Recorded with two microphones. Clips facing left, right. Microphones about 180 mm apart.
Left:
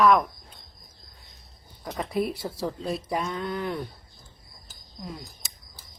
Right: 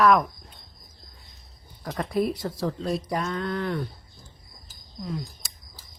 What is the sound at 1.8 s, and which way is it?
Speech, centre (ahead or behind).